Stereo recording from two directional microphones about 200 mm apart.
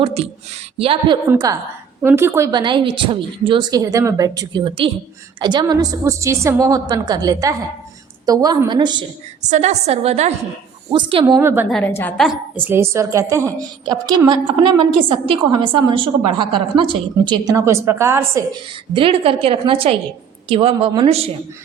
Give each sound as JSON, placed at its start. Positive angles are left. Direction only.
{"t": 0.0, "sound": "a woman's voice", "side_deg": -30}
{"t": 9.5, "sound": "a woman's voice", "side_deg": -35}
{"t": 11.3, "sound": "a woman's voice", "side_deg": -10}
{"t": 11.9, "sound": "a woman's voice", "side_deg": 10}
{"t": 12.6, "sound": "a woman's voice", "side_deg": -10}
{"t": 18.9, "sound": "a woman's voice", "side_deg": -30}